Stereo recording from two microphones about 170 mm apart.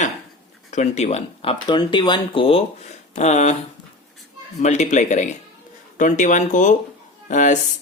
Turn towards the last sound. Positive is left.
turn(degrees=45)  # may be behind; listen again after turning